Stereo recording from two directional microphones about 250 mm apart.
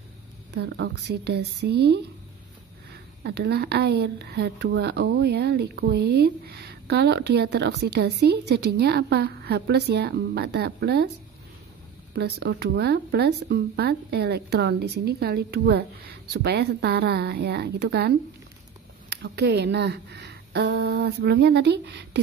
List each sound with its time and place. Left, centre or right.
0.6 s a woman's voice: right
3.3 s a woman's voice: right
12.1 s a woman's voice: right